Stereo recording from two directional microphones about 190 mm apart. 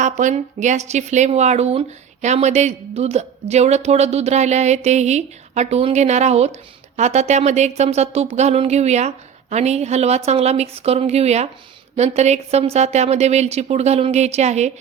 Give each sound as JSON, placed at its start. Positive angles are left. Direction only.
{"t": 0.0, "sound": "speech", "side_deg": -40}